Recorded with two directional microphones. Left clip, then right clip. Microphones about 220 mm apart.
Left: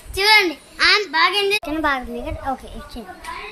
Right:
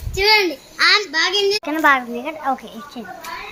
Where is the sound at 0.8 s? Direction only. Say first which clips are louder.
Right 1 dB; 10° left (ahead or behind).